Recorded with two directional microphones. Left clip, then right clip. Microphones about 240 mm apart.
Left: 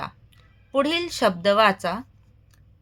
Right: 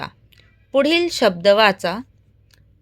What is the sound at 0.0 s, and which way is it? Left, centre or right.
A woman's voice, right.